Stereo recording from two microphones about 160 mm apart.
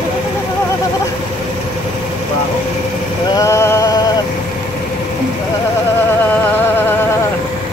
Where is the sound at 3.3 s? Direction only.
20° left (ahead or behind).